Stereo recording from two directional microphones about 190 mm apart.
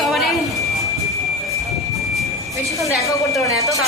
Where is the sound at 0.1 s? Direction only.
Centre (ahead or behind).